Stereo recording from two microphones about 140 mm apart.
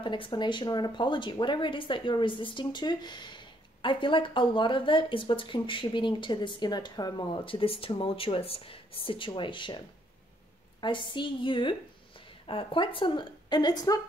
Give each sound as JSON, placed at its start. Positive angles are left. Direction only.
{"t": 0.0, "sound": "speech", "side_deg": 35}
{"t": 10.8, "sound": "speech", "side_deg": 35}